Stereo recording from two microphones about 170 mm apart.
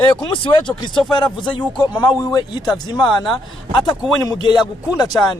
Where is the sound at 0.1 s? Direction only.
30° left (ahead or behind).